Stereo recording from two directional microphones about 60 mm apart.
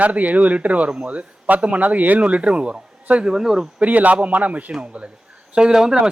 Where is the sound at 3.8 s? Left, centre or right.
Right.